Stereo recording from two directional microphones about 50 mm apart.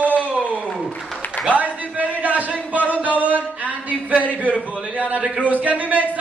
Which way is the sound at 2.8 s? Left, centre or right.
Right.